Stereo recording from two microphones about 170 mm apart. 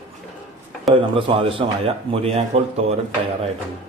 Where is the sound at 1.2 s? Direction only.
30° right (ahead or behind).